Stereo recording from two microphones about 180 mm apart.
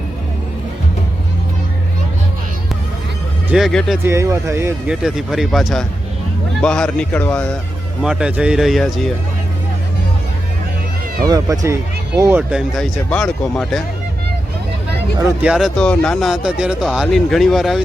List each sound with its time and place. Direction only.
3.5 s speech: centre (ahead or behind)
4.0 s speech: 15° right (ahead or behind)
4.9 s speech: centre (ahead or behind)
8.0 s speech: 5° right (ahead or behind)
11.3 s speech: 20° right (ahead or behind); by 13.8 s 5° left (ahead or behind)
15.4 s speech: 5° right (ahead or behind)